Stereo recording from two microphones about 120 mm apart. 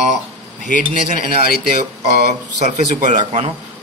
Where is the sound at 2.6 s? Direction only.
90° right.